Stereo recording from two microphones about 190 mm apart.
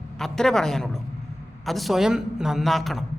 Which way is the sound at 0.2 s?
5° left (ahead or behind).